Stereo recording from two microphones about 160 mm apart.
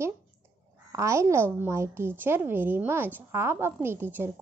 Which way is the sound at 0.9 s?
20° right (ahead or behind).